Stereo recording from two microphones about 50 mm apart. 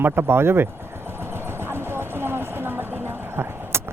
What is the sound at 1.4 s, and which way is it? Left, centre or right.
Vehicle, right.